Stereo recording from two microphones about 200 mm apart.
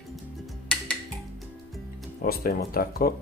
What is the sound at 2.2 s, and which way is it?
Speech, 45° left (ahead or behind).